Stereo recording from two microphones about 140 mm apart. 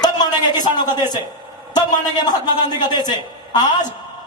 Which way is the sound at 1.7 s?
30° left (ahead or behind).